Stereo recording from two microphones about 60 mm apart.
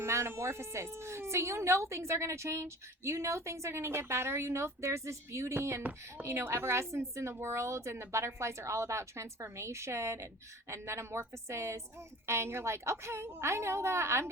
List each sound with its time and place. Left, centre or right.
0.0 s speech: right